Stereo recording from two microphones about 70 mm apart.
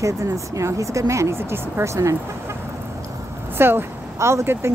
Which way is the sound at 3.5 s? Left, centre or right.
Right.